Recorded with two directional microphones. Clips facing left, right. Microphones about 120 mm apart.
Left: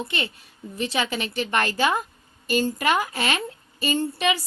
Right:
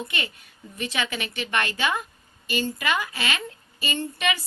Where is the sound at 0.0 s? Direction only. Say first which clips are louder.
Left 3 dB; 30° left (ahead or behind).